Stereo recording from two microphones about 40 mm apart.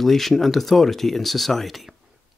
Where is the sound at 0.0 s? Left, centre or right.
Centre.